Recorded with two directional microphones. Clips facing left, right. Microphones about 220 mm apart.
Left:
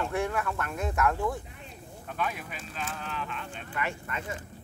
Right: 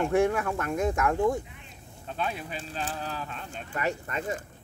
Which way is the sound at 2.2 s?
30° right (ahead or behind).